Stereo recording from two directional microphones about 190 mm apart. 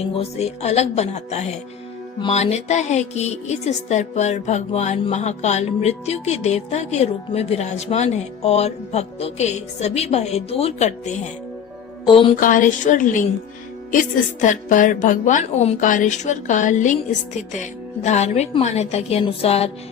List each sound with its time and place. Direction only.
0.0 s speech: 30° left (ahead or behind)
12.0 s music: 25° left (ahead or behind)
12.4 s a woman's voice: 45° left (ahead or behind)